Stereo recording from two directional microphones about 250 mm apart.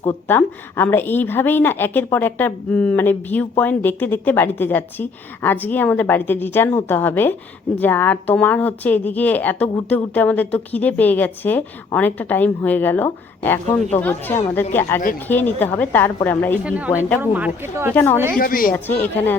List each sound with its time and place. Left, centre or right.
0.0 s speech: centre
16.6 s a woman's voice: centre
17.9 s speech: centre
18.3 s a woman's voice: left
18.7 s speech: centre